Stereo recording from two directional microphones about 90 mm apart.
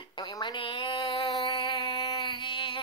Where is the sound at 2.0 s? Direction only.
60° left (ahead or behind).